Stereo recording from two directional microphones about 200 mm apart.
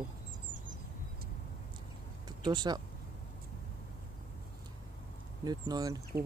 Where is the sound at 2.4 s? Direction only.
20° right (ahead or behind).